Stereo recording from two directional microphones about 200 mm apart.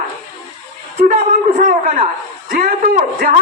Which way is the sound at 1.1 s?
40° right (ahead or behind).